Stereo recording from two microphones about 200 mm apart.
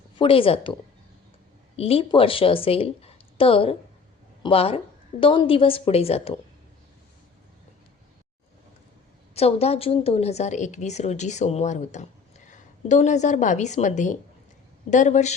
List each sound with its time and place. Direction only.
0.2 s a woman's voice: 25° left (ahead or behind)
9.3 s a woman's voice: 30° left (ahead or behind)